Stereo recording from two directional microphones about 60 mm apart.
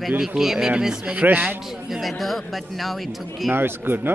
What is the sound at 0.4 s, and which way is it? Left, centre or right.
Speech, centre.